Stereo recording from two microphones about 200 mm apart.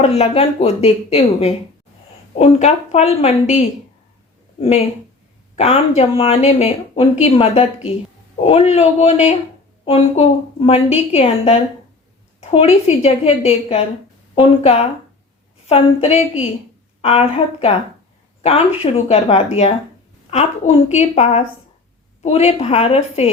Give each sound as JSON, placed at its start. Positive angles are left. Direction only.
{"t": 0.0, "sound": "speech", "side_deg": 30}
{"t": 5.5, "sound": "a woman's voice", "side_deg": 30}